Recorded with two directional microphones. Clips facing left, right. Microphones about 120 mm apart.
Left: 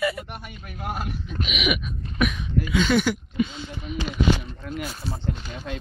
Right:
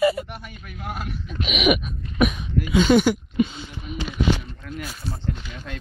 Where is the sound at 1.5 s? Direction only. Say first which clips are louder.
Right 7 dB; 50° right (ahead or behind).